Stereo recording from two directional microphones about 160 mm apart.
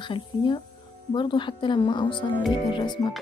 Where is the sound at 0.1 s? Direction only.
30° left (ahead or behind).